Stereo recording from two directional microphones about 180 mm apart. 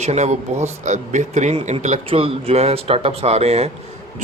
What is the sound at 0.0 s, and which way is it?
A man's voice, 40° right (ahead or behind).